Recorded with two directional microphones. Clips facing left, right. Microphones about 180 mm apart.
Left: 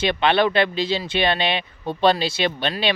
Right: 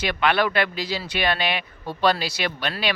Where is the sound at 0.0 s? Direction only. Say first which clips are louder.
Left 3 dB; 25° left (ahead or behind).